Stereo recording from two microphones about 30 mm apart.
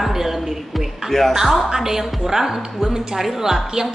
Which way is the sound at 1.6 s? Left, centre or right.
Centre.